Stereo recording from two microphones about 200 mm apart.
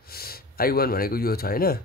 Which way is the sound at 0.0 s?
50° left (ahead or behind).